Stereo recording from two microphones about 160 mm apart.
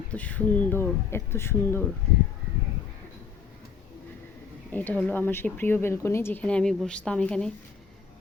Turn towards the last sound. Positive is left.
turn(degrees=5)  # may be behind; listen again after turning